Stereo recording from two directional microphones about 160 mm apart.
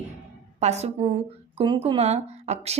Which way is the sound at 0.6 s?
45° right (ahead or behind).